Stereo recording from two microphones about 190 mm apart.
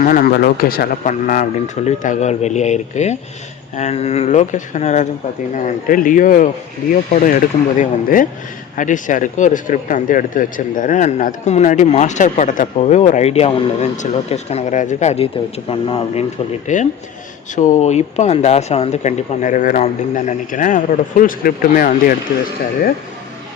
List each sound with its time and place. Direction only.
0.0 s speech: 50° left (ahead or behind); by 16.2 s 30° left (ahead or behind)
16.7 s speech: 40° left (ahead or behind)